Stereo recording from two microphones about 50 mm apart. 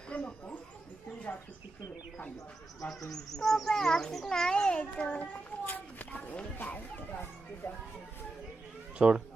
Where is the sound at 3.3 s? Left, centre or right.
Centre; by 7.7 s left.